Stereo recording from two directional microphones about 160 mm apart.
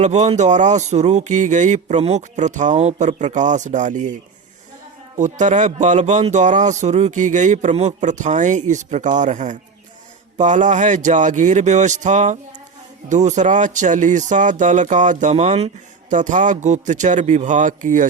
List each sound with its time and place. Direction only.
0.0 s speech: 45° right (ahead or behind)